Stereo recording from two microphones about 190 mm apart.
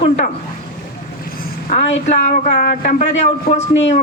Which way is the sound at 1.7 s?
40° left (ahead or behind).